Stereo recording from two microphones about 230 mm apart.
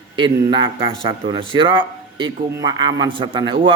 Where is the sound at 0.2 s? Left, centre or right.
Right.